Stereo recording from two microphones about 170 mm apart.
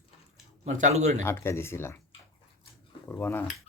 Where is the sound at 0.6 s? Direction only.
40° right (ahead or behind).